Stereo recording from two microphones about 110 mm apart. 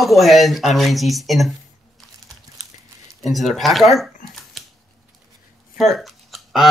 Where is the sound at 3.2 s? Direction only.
Centre (ahead or behind).